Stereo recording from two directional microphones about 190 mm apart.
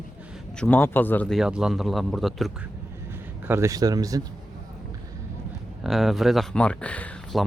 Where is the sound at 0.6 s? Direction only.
10° left (ahead or behind).